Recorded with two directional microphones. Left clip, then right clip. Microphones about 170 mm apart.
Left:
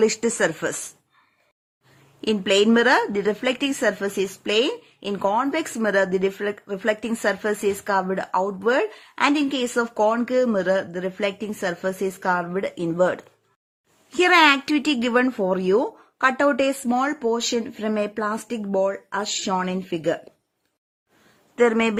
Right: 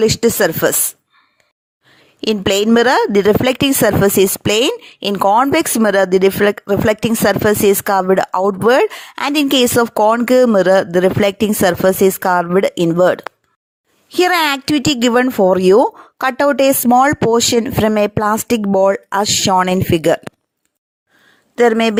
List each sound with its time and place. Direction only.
0.0 s speech: 25° right (ahead or behind)
2.2 s a woman's voice: 40° right (ahead or behind)
21.5 s speech: 30° right (ahead or behind)